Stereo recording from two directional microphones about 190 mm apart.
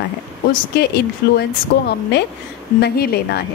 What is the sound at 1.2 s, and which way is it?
A woman's voice, 55° left (ahead or behind).